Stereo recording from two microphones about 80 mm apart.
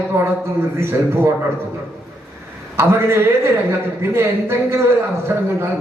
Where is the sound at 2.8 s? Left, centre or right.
Right.